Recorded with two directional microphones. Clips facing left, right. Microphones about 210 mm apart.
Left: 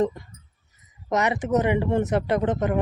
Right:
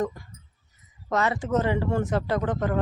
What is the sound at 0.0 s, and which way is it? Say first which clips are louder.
Speech: left 5 dB; 25° left (ahead or behind).